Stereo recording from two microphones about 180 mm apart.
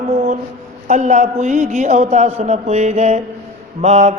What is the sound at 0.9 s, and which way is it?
Mantra, 40° right (ahead or behind).